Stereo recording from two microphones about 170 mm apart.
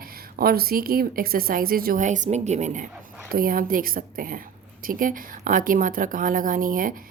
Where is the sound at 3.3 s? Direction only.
55° right (ahead or behind).